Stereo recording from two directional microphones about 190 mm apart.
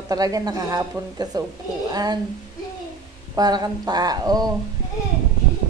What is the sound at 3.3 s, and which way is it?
A woman's voice, 20° right (ahead or behind).